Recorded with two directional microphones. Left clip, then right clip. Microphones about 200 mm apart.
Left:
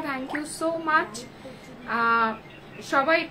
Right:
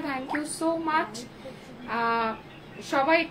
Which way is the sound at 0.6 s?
10° left (ahead or behind).